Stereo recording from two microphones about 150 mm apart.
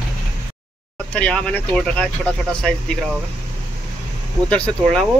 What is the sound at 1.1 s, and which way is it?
Speech, 10° left (ahead or behind).